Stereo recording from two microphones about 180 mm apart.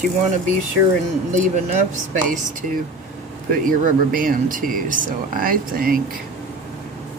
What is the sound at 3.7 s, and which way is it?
Speech, 50° right (ahead or behind).